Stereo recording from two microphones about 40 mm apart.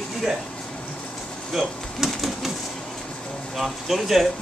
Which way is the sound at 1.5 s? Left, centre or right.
Centre.